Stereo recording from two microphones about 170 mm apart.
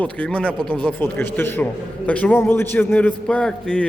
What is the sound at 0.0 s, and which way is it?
A man's voice, 10° left (ahead or behind).